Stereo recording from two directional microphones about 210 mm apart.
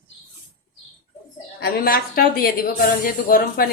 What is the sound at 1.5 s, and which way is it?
A woman's voice, 45° left (ahead or behind).